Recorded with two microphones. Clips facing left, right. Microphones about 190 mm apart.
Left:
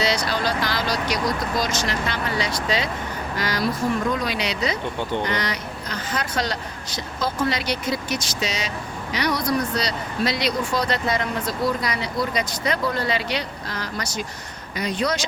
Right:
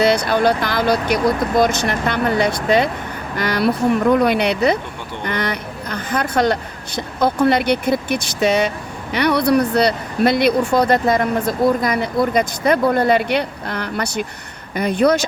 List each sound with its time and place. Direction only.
0.0 s speech: 55° right (ahead or behind)